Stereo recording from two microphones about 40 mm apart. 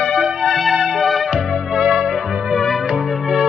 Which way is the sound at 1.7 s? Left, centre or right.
Centre.